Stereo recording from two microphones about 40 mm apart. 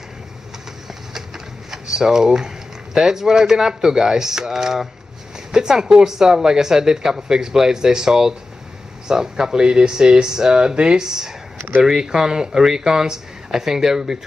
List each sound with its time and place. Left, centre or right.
1.7 s speech: centre